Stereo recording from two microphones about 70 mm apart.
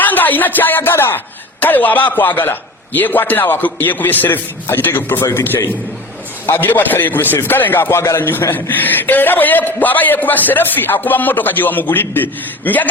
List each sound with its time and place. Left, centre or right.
0.0 s speech: left